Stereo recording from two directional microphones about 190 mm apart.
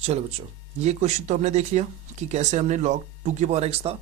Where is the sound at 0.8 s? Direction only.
35° right (ahead or behind).